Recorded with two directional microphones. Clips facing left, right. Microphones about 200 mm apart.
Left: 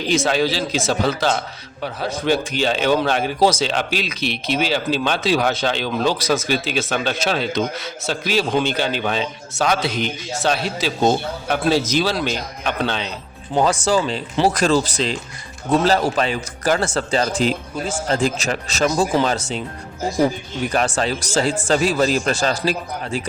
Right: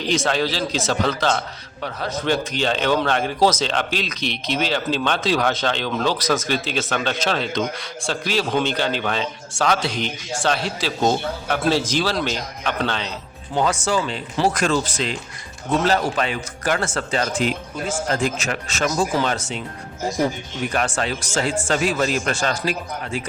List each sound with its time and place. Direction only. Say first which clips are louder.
0.1 s a man's voice: left 3 dB; 10° left (ahead or behind)
13.6 s speech: left 3 dB; 35° left (ahead or behind)
20.7 s speech: left 3 dB; 35° left (ahead or behind)